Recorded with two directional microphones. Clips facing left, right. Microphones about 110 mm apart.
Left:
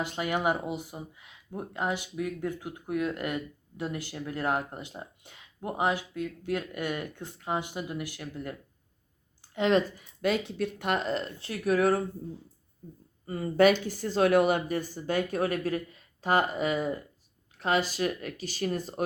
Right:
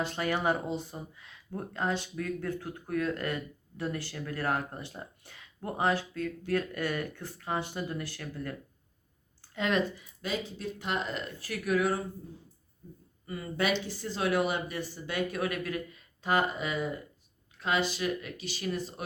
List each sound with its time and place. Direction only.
0.0 s speech: 15° left (ahead or behind)
9.6 s speech: 30° left (ahead or behind)
9.9 s speech: 60° left (ahead or behind)
11.0 s speech: 30° left (ahead or behind)
11.8 s speech: 45° left (ahead or behind)
13.2 s speech: 40° left (ahead or behind)